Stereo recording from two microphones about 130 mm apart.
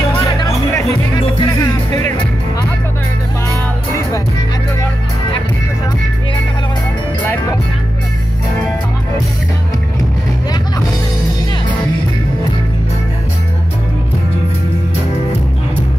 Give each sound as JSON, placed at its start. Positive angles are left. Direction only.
{"t": 0.7, "sound": "music", "side_deg": 30}
{"t": 3.4, "sound": "music", "side_deg": 25}